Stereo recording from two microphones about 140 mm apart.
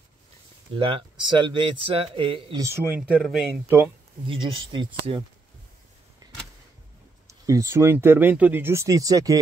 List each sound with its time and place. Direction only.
0.7 s speech: 40° right (ahead or behind)
2.6 s speech: 15° right (ahead or behind)
3.0 s speech: 5° right (ahead or behind)
3.6 s speech: 20° right (ahead or behind)
4.3 s speech: 40° right (ahead or behind)
7.2 s speech: 20° right (ahead or behind)